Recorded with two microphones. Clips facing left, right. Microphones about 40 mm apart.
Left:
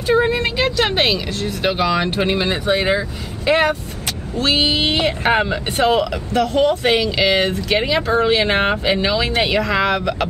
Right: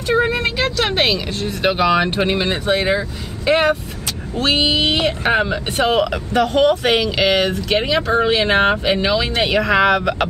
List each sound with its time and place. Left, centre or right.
0.0 s vehicle: centre
0.7 s speech: centre
1.6 s speech: centre
2.0 s speech: centre
4.8 s speech: centre
5.9 s speech: right
6.5 s speech: centre
7.2 s speech: centre
9.7 s speech: centre